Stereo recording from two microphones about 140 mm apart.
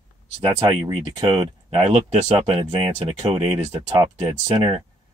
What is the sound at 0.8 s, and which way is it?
Speech, 35° right (ahead or behind).